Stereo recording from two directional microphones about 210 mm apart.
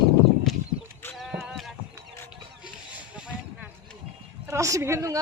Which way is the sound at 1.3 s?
Centre (ahead or behind).